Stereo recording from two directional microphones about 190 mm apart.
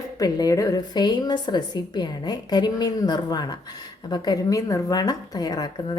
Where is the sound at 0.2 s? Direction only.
20° left (ahead or behind).